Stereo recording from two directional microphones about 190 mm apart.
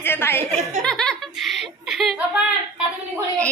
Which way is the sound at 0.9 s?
5° left (ahead or behind).